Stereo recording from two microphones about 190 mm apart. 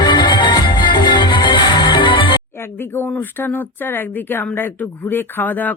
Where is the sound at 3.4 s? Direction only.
10° left (ahead or behind).